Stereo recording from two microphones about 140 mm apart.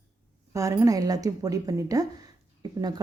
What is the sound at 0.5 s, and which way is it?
Speech, 20° right (ahead or behind).